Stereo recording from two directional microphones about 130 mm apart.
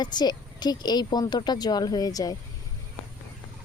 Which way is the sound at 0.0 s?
35° left (ahead or behind).